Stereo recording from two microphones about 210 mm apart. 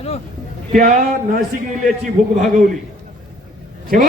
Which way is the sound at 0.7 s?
40° right (ahead or behind).